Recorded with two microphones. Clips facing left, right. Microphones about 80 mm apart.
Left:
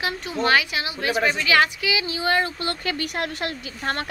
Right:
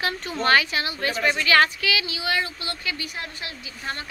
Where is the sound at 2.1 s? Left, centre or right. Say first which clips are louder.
Left 4 dB; left.